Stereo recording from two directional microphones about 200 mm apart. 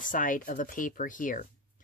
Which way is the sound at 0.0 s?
40° left (ahead or behind).